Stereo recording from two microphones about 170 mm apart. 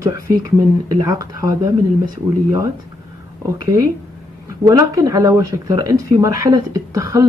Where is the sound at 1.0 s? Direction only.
20° right (ahead or behind).